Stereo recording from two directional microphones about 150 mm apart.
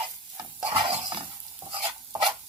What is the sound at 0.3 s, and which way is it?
Stir, 35° right (ahead or behind).